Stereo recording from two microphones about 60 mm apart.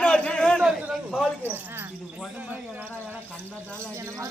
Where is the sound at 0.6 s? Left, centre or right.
Centre.